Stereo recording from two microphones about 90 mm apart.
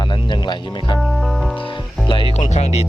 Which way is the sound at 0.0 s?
55° left (ahead or behind).